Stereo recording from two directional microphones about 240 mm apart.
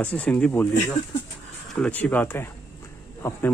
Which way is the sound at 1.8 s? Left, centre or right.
Centre.